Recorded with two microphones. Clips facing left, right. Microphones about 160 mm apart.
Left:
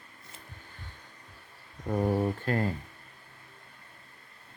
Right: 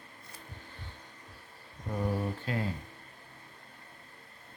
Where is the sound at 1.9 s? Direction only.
50° left (ahead or behind).